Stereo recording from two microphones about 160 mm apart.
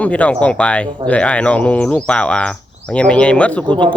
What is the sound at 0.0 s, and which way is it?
Speech, 10° left (ahead or behind).